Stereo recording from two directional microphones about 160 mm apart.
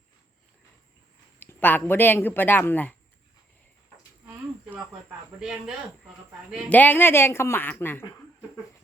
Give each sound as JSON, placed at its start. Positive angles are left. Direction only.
{"t": 1.4, "sound": "speech", "side_deg": 10}
{"t": 4.7, "sound": "speech", "side_deg": -10}
{"t": 6.7, "sound": "speech", "side_deg": 10}